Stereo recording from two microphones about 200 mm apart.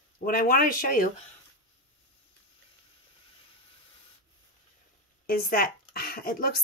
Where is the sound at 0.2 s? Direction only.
45° left (ahead or behind).